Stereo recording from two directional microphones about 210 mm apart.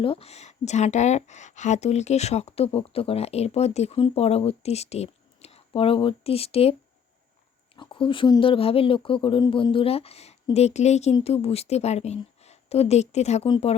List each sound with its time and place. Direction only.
0.0 s speech: 25° left (ahead or behind)
7.8 s speech: 25° left (ahead or behind)